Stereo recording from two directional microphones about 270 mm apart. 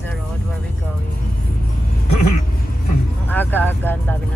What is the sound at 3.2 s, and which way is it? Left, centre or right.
Speech, centre.